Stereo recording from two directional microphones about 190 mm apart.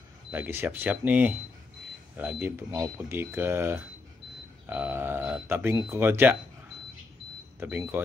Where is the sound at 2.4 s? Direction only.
15° right (ahead or behind).